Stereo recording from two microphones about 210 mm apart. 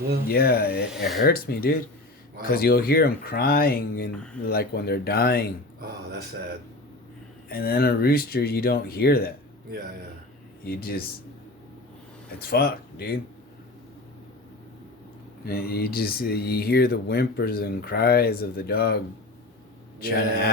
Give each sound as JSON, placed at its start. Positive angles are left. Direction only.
{"t": 0.3, "sound": "speech", "side_deg": 45}
{"t": 0.9, "sound": "speech", "side_deg": 0}
{"t": 1.2, "sound": "speech", "side_deg": 45}
{"t": 4.1, "sound": "speech", "side_deg": 5}
{"t": 4.4, "sound": "speech", "side_deg": 50}
{"t": 7.5, "sound": "speech", "side_deg": 45}
{"t": 10.7, "sound": "speech", "side_deg": 45}
{"t": 12.4, "sound": "speech", "side_deg": 45}
{"t": 15.4, "sound": "speech", "side_deg": 45}
{"t": 20.0, "sound": "speech", "side_deg": 45}